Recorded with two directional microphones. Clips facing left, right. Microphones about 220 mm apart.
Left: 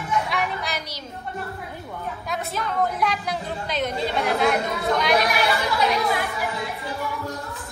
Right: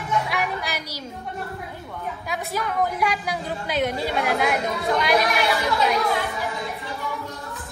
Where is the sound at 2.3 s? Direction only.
5° right (ahead or behind).